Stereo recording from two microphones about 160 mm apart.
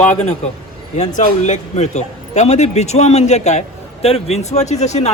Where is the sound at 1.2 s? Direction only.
50° left (ahead or behind).